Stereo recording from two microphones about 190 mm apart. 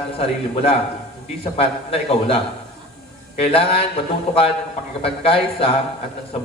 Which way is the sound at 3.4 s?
30° left (ahead or behind).